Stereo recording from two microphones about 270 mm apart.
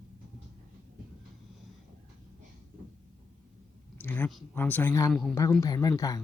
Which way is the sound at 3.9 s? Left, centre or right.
Centre.